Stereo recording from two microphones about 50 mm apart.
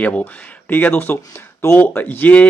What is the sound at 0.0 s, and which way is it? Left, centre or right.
Speech, left.